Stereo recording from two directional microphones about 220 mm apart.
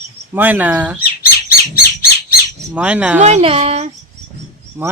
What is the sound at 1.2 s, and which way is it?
Bird, 40° left (ahead or behind).